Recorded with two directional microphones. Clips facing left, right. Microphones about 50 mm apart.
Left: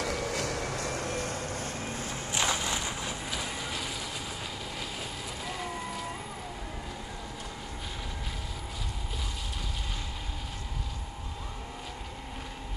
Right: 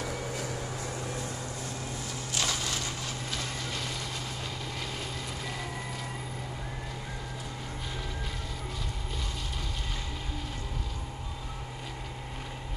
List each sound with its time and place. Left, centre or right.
0.0 s vehicle: left
2.3 s a sound: left
3.3 s vehicle: centre